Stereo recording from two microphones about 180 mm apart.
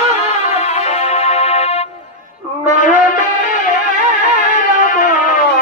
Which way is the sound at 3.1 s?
45° left (ahead or behind).